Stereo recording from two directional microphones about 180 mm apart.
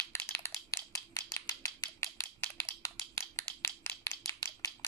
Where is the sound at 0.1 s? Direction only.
15° left (ahead or behind).